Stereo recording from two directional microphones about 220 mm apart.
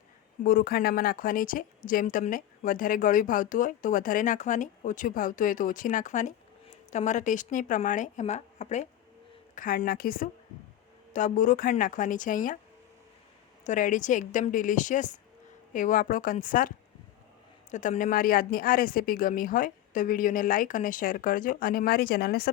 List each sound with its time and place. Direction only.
0.4 s speech: 40° left (ahead or behind)
13.7 s speech: 35° left (ahead or behind)